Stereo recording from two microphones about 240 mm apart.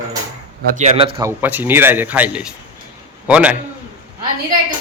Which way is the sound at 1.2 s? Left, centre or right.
Centre.